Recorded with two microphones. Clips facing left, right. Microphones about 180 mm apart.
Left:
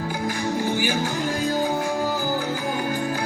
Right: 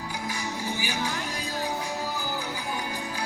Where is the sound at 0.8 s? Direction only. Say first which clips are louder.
Left 7 dB; 50° left (ahead or behind).